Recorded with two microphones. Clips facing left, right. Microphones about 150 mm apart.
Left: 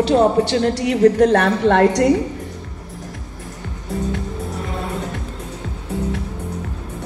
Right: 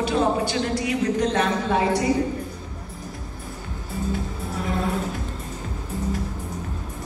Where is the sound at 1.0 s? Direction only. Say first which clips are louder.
Left 11 dB; 55° left (ahead or behind); by 2.1 s 70° left (ahead or behind).